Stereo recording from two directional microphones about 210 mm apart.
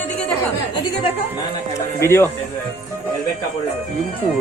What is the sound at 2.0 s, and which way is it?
Speech, 10° left (ahead or behind).